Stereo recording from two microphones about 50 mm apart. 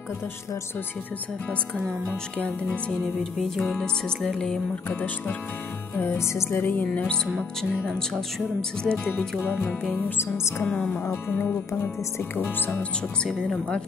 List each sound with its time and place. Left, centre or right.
3.3 s speech: centre
5.9 s music: left
6.6 s speech: left
8.5 s speech: centre
10.1 s music: left
10.6 s speech: left
11.2 s speech: left
13.5 s speech: left